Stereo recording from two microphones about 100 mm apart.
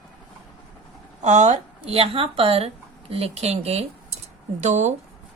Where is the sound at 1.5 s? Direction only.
85° right.